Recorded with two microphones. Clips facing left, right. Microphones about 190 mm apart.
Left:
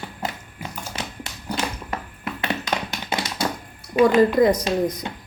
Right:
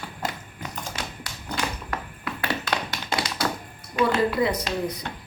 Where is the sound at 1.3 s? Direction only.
25° left (ahead or behind).